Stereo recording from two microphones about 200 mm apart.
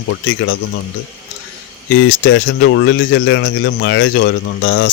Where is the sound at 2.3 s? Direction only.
65° left (ahead or behind).